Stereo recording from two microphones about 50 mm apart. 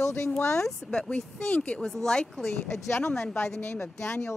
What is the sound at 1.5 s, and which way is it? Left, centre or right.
Speech, left.